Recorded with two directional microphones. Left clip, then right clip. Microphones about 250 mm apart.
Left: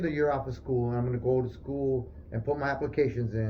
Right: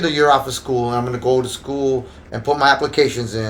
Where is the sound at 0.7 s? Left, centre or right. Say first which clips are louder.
Right 11 dB; right.